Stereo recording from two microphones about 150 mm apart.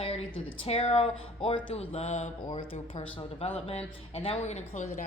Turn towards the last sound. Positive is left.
turn(degrees=55)  # may be behind; listen again after turning